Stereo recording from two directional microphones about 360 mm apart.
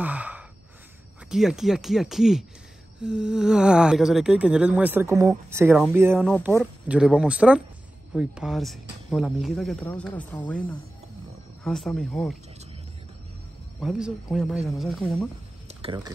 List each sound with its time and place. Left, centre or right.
0.0 s gasp: centre
1.3 s speech: centre
13.7 s speech: centre
15.8 s speech: centre